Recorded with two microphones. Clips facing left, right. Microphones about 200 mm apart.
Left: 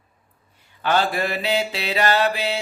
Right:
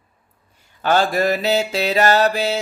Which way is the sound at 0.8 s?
40° right (ahead or behind).